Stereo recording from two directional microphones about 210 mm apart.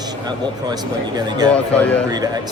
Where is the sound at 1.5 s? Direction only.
5° left (ahead or behind).